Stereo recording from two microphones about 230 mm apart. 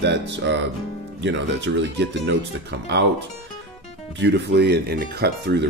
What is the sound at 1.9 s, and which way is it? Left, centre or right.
Speech, right.